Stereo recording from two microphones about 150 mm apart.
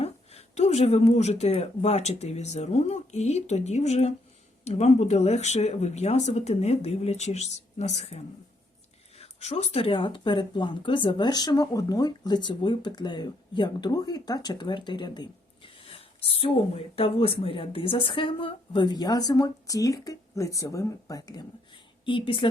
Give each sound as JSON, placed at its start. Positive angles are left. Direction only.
{"t": 0.0, "sound": "speech", "side_deg": 45}